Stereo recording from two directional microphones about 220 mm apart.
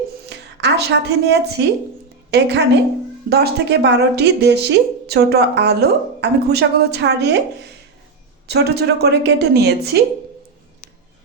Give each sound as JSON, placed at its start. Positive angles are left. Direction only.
{"t": 0.3, "sound": "a woman's voice", "side_deg": -50}
{"t": 8.4, "sound": "speech", "side_deg": -50}